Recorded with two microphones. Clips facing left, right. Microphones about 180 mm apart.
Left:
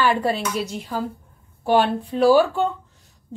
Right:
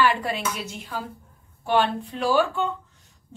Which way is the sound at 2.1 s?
35° left (ahead or behind).